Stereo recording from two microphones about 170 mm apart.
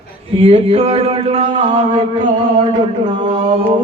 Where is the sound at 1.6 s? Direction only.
25° right (ahead or behind).